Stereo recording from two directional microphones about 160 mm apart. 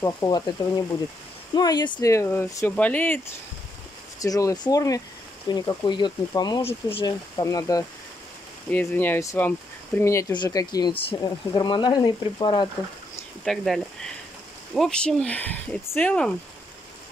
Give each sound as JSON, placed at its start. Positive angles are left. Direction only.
{"t": 0.0, "sound": "speech", "side_deg": 20}
{"t": 4.2, "sound": "speech", "side_deg": 20}
{"t": 13.4, "sound": "speech", "side_deg": 0}